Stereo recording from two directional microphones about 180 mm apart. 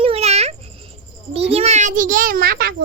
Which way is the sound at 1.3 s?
35° right (ahead or behind).